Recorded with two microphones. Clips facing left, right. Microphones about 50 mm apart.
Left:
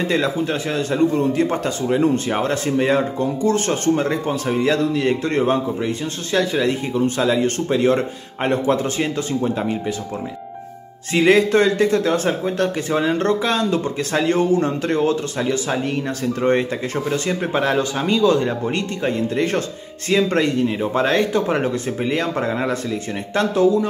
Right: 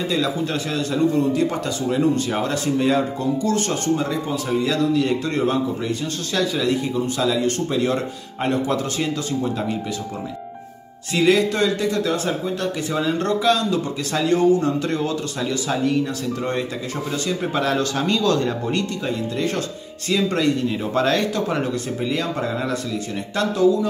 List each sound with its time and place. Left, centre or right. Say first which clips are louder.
0.5 s speech: left 2 dB; left
3.9 s speech: left 2 dB; left
11.1 s speech: left 3 dB; left
17.7 s speech: left 2 dB; centre
18.7 s speech: left 2 dB; left
20.8 s speech: left 1 dB; left